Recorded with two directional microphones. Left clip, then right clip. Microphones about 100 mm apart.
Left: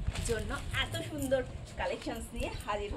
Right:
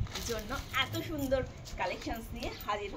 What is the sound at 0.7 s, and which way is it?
Speech, 40° left (ahead or behind).